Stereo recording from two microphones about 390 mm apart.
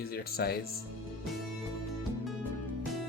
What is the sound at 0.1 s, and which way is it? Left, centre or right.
Speech, left.